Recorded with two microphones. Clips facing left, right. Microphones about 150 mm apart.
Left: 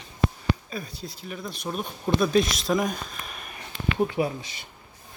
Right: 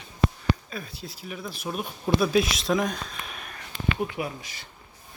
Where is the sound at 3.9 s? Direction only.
30° left (ahead or behind).